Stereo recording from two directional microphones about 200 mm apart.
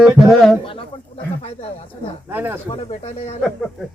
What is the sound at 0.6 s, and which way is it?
Speech, 25° left (ahead or behind).